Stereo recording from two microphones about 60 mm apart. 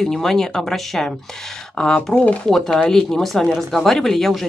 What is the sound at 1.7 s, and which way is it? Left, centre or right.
Speech, centre.